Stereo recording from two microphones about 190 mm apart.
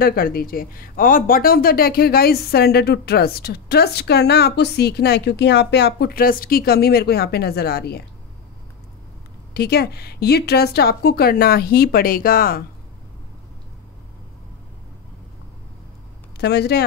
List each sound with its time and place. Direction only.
0.0 s speech: 50° left (ahead or behind)
9.5 s speech: 55° left (ahead or behind)
16.3 s speech: 60° left (ahead or behind)